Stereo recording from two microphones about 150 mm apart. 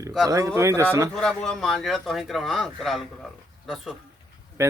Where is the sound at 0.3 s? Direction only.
20° right (ahead or behind).